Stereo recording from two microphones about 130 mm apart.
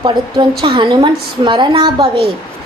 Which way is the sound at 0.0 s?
35° right (ahead or behind).